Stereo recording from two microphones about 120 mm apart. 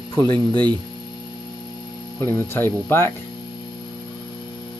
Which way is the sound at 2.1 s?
20° left (ahead or behind).